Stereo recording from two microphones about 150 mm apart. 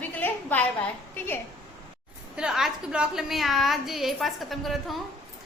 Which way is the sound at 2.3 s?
5° right (ahead or behind).